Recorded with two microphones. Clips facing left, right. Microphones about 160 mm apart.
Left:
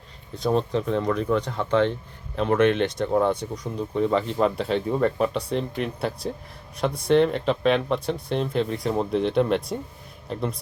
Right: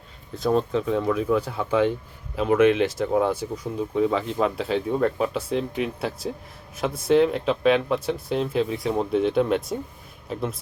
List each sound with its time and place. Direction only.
0.3 s speech: centre (ahead or behind)